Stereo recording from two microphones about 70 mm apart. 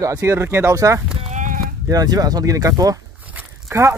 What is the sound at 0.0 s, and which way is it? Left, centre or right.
Speech, right.